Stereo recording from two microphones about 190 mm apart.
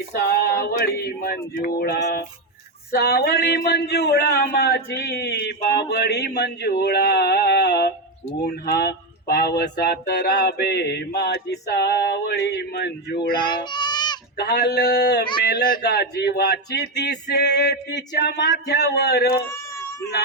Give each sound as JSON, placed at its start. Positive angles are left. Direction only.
{"t": 0.4, "sound": "speech", "side_deg": 55}
{"t": 13.3, "sound": "music", "side_deg": 25}
{"t": 14.3, "sound": "speech", "side_deg": 60}
{"t": 19.5, "sound": "baby cry", "side_deg": 15}